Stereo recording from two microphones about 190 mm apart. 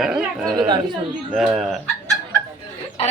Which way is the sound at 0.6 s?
25° right (ahead or behind).